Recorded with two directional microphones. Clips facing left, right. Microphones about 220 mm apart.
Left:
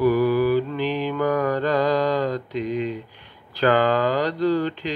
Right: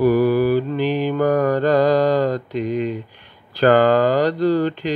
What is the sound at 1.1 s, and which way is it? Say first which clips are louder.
Mantra: right 5 dB; 40° right (ahead or behind).